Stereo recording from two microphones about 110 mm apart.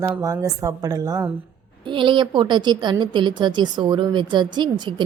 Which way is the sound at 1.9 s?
50° right (ahead or behind).